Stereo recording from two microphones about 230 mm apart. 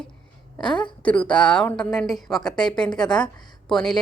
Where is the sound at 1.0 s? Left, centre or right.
Centre.